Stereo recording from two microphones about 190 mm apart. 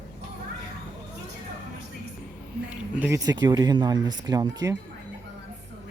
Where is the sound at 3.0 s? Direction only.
15° right (ahead or behind).